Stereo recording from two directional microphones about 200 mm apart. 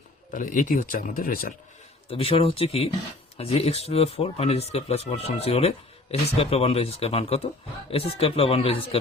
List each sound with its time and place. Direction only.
0.3 s speech: 40° left (ahead or behind)
2.0 s speech: 30° left (ahead or behind)